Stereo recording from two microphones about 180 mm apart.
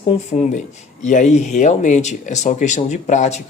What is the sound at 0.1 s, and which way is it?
Speech, 40° left (ahead or behind).